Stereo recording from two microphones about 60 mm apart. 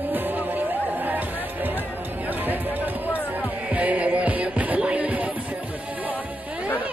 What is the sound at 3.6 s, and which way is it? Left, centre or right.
Music, right.